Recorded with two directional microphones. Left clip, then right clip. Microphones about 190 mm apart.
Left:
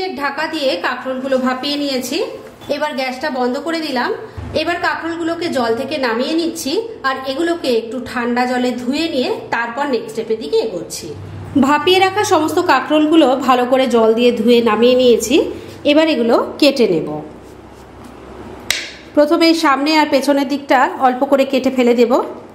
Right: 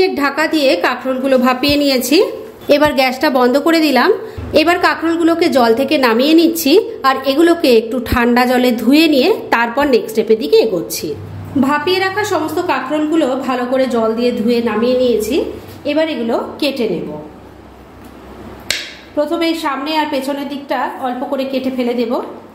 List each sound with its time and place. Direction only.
0.0 s a woman's voice: 35° right (ahead or behind)
11.6 s a woman's voice: 30° left (ahead or behind); by 16.8 s 45° left (ahead or behind)
19.1 s a woman's voice: 45° left (ahead or behind)